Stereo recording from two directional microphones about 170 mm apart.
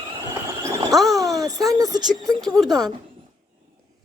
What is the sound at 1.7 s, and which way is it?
Speech, 20° right (ahead or behind).